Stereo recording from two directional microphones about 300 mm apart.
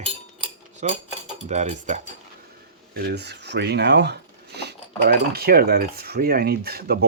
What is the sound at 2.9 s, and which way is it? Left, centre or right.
Speech, right.